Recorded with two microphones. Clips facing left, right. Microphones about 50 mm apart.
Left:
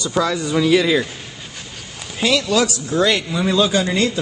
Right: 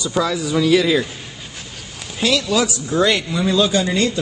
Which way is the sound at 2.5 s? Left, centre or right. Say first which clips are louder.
Even; centre.